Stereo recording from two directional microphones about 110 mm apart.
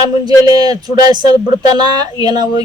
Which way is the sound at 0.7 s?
40° right (ahead or behind).